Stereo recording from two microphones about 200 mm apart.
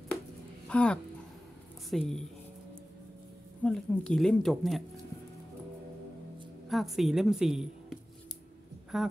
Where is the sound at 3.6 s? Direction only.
5° left (ahead or behind).